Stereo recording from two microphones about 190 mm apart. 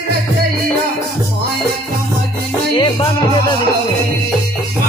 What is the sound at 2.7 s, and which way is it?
Music, 25° left (ahead or behind).